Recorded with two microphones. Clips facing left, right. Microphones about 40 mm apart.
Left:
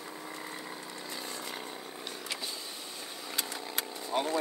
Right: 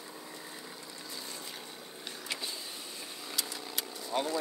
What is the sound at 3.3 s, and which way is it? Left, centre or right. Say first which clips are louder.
Vehicle: left 1 dB; left.